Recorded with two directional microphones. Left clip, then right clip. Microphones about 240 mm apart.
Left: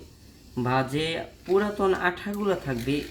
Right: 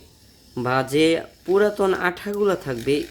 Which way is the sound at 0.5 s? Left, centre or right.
Right.